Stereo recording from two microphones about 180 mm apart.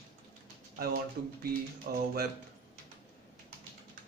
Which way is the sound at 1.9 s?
55° right (ahead or behind).